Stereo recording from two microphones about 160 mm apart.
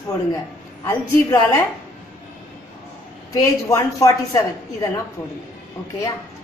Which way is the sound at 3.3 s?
20° left (ahead or behind).